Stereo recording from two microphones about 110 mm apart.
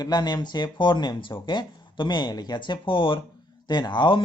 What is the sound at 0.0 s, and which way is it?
Speech, 40° left (ahead or behind).